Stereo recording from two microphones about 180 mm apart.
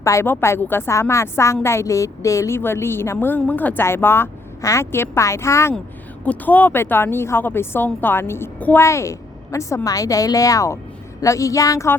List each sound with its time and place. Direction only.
0.0 s a woman's voice: 15° left (ahead or behind)